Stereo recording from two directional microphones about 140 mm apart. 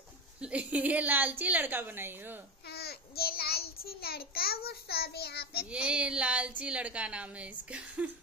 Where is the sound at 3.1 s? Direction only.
90° left.